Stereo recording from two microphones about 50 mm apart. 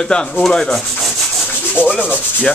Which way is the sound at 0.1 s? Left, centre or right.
Centre.